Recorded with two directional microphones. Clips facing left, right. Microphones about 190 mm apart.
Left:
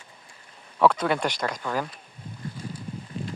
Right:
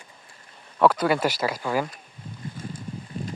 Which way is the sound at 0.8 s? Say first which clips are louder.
Right 2 dB; 5° right (ahead or behind).